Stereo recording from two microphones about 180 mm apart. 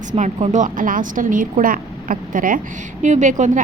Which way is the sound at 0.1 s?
40° right (ahead or behind).